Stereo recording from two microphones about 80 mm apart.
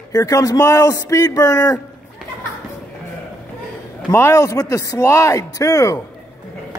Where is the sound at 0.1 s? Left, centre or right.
Left.